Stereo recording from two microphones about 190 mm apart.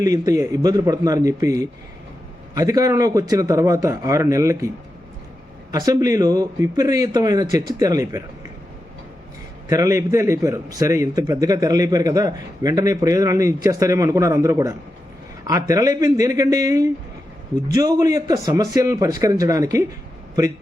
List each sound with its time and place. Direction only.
0.0 s a man's voice: 15° right (ahead or behind)
5.7 s a man's voice: 20° right (ahead or behind)
9.6 s a man's voice: 15° right (ahead or behind)